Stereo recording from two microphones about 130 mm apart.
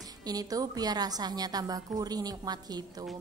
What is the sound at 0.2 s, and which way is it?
A woman's voice, 30° right (ahead or behind).